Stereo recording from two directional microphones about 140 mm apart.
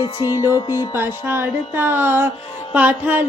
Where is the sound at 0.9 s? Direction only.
15° right (ahead or behind).